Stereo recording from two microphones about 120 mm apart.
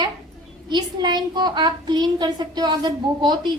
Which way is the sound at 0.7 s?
40° right (ahead or behind).